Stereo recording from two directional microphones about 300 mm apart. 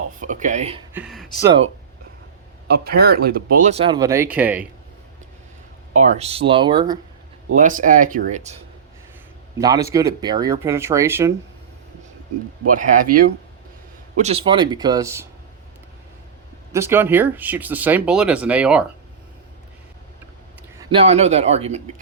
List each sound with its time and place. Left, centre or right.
0.2 s speech: right
0.9 s speech: centre
2.6 s speech: right; by 4.6 s centre
6.0 s speech: right
7.5 s speech: right
9.6 s speech: centre
12.6 s speech: right; by 15.3 s centre
16.7 s speech: centre
20.7 s speech: centre